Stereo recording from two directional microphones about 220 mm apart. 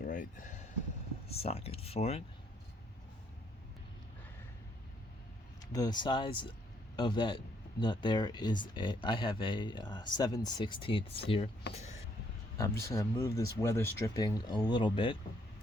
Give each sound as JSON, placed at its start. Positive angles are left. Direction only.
{"t": 0.0, "sound": "a sound", "side_deg": 35}
{"t": 1.4, "sound": "speech", "side_deg": 30}
{"t": 5.7, "sound": "speech", "side_deg": 20}
{"t": 12.5, "sound": "speech", "side_deg": 15}